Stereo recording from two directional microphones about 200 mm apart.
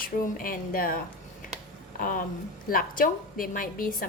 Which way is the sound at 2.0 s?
40° left (ahead or behind).